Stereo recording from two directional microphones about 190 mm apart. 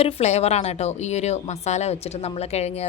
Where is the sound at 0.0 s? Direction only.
35° left (ahead or behind).